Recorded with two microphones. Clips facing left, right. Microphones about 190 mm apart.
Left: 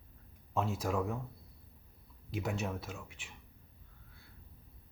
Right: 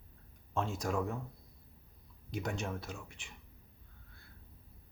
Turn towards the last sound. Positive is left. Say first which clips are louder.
# even
turn(degrees=0)  # may be behind; listen again after turning